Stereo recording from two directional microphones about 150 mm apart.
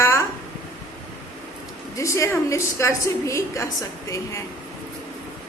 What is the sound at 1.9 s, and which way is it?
A woman's voice, 20° left (ahead or behind).